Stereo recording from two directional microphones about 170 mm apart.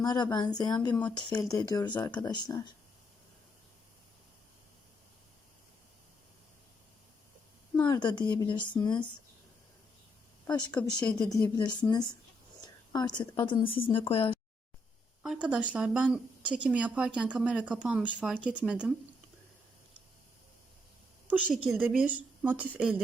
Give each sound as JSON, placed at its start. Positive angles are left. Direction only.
{"t": 0.0, "sound": "a woman's voice", "side_deg": 25}
{"t": 0.9, "sound": "speech", "side_deg": 10}
{"t": 1.4, "sound": "a woman's voice", "side_deg": 20}
{"t": 7.9, "sound": "a woman's voice", "side_deg": 25}
{"t": 10.7, "sound": "speech", "side_deg": 5}
{"t": 11.3, "sound": "a woman's voice", "side_deg": 20}
{"t": 12.6, "sound": "whispering", "side_deg": 25}
{"t": 13.3, "sound": "speech", "side_deg": 30}
{"t": 15.2, "sound": "speech", "side_deg": -5}
{"t": 21.2, "sound": "speech", "side_deg": -10}